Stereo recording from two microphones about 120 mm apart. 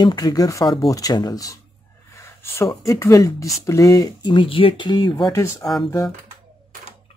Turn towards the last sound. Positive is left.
turn(degrees=25)  # may be behind; listen again after turning